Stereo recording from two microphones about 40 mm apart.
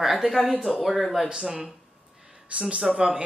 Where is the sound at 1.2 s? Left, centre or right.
Centre.